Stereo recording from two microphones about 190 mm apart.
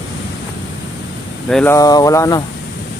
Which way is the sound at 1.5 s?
5° left (ahead or behind).